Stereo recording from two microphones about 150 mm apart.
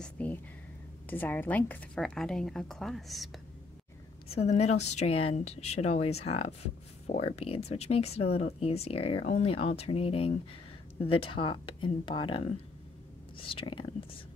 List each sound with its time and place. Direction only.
0.0 s a sound: 10° left (ahead or behind)
1.1 s a woman's voice: 15° left (ahead or behind)
4.3 s speech: 45° left (ahead or behind)